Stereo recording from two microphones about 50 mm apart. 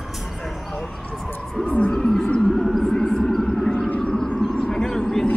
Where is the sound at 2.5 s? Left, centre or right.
Centre.